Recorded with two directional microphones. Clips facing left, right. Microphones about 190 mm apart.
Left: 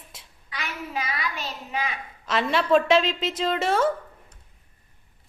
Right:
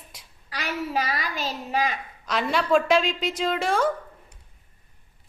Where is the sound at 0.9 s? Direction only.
35° right (ahead or behind).